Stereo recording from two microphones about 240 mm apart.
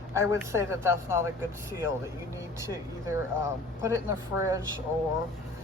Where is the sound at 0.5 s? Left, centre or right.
Centre.